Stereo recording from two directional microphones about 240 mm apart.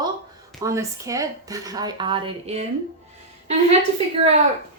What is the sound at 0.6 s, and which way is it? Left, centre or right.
Speech, centre.